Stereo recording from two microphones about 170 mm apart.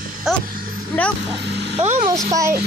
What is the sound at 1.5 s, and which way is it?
Vehicle, 85° right.